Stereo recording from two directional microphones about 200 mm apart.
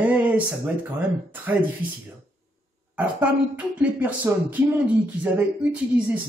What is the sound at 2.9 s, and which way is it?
A man's voice, 5° right (ahead or behind).